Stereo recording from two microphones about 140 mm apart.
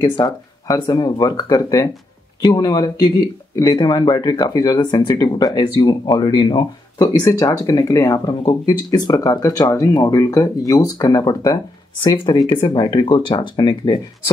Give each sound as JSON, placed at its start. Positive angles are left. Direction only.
{"t": 0.0, "sound": "speech", "side_deg": 30}